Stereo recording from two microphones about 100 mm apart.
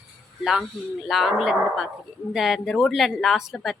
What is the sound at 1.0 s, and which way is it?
A woman's voice, centre (ahead or behind).